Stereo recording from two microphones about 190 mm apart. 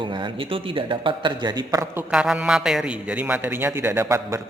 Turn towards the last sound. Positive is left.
turn(degrees=-15)  # may be behind; listen again after turning